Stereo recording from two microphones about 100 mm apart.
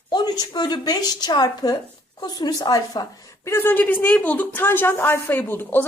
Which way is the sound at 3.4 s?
25° left (ahead or behind).